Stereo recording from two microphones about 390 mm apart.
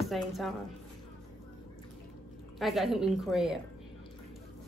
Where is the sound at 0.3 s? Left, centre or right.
Centre.